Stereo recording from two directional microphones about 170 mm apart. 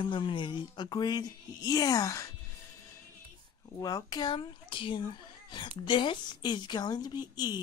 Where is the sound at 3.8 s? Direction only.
20° left (ahead or behind).